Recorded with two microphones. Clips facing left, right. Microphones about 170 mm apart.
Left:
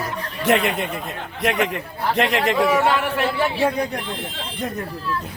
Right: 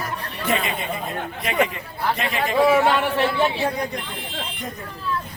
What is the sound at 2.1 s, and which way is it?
Speech, 85° left.